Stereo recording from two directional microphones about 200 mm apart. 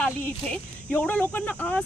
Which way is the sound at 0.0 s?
10° left (ahead or behind).